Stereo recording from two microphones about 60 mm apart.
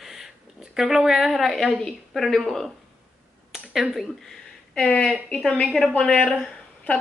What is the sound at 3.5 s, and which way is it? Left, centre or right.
Speech, centre.